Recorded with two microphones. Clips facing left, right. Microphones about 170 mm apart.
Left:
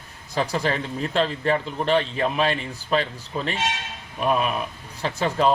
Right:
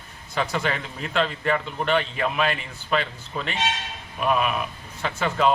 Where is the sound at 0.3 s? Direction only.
35° left (ahead or behind).